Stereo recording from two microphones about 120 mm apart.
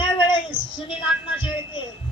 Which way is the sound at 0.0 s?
45° left (ahead or behind).